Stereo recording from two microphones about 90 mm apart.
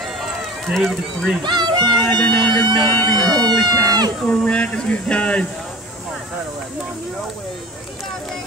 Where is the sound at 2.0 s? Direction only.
10° left (ahead or behind).